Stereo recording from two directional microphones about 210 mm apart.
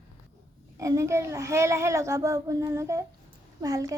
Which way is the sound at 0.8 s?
15° right (ahead or behind).